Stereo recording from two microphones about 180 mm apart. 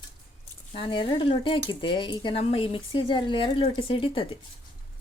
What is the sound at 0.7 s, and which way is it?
Speech, 30° left (ahead or behind).